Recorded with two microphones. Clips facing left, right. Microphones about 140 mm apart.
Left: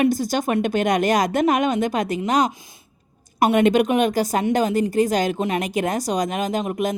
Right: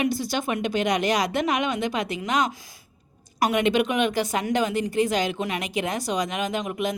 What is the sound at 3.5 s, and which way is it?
A woman's voice, 45° left (ahead or behind).